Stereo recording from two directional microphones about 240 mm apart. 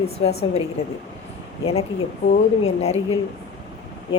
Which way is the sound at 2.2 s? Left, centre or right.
Left.